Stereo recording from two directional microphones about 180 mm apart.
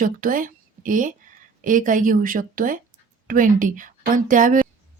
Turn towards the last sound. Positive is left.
turn(degrees=-45)  # may be behind; listen again after turning